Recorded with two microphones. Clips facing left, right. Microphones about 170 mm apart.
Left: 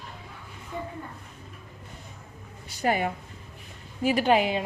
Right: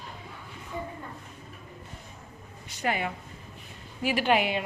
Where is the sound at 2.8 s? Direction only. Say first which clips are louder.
Left 4 dB; 40° left (ahead or behind).